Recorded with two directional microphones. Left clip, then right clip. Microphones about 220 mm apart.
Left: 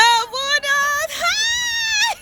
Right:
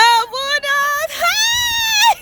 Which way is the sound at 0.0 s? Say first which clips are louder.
Right 2 dB; 25° right (ahead or behind).